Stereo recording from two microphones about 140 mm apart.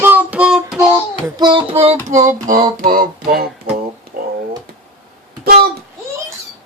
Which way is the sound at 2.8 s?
90° right.